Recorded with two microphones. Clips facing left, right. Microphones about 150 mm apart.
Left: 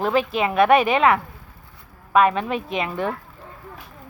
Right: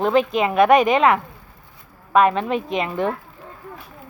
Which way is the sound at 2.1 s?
30° right (ahead or behind).